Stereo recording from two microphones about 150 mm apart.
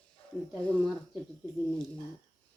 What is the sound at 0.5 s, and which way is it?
Speech, 10° left (ahead or behind).